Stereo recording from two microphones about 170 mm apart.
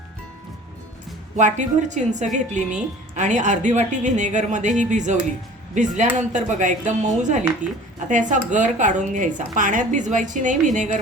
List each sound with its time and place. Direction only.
1.4 s speech: 45° right (ahead or behind)